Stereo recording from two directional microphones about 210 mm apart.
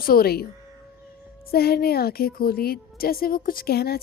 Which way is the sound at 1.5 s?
45° left (ahead or behind).